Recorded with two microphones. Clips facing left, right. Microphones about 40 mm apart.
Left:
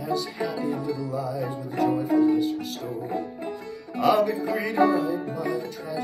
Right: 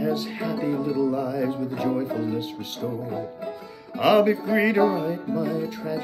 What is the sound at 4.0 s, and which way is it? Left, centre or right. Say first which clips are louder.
Music: right 3 dB; right.